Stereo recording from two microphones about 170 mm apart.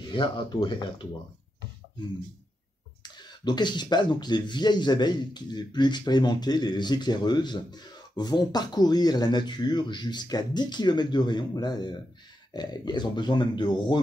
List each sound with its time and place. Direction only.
0.1 s speech: 30° left (ahead or behind)
3.0 s speech: 25° left (ahead or behind)